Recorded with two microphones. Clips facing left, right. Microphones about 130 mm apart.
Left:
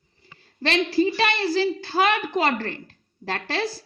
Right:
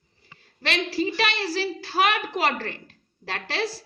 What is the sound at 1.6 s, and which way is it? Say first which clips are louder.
Speech: left 2 dB; 30° left (ahead or behind).